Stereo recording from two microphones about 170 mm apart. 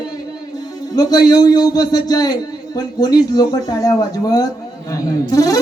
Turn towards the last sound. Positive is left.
turn(degrees=20)  # may be behind; listen again after turning